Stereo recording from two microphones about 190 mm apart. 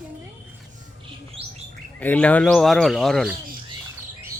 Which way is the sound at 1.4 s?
30° right (ahead or behind).